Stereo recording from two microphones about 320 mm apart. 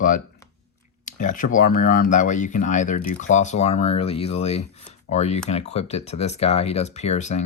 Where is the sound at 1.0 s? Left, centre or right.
Left.